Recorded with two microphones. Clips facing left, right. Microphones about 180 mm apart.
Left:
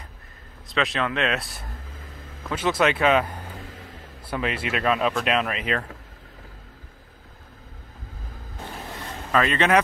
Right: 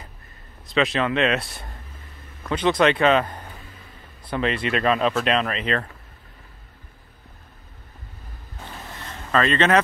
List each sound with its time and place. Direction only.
0.7 s speech: centre (ahead or behind)
2.0 s a sound: 90° left
2.4 s speech: 5° left (ahead or behind)
3.5 s music: 90° left
4.3 s speech: 5° left (ahead or behind)
9.3 s speech: 10° left (ahead or behind)